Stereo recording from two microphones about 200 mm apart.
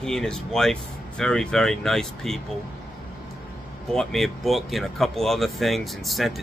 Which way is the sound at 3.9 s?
Centre (ahead or behind).